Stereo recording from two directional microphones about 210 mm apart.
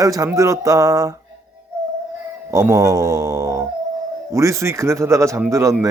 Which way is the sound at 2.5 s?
15° right (ahead or behind).